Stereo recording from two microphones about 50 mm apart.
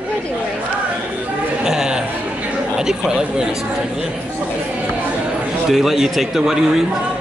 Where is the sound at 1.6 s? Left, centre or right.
Centre.